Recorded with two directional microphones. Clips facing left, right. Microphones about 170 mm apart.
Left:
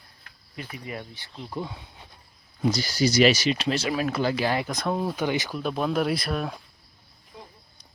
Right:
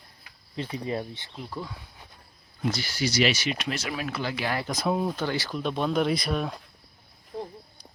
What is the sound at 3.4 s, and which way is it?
Speech, 30° left (ahead or behind).